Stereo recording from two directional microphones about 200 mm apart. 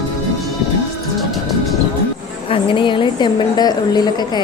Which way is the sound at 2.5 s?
25° left (ahead or behind).